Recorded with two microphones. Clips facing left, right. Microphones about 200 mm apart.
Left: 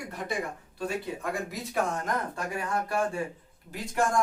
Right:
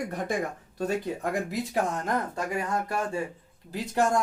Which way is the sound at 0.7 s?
40° right (ahead or behind).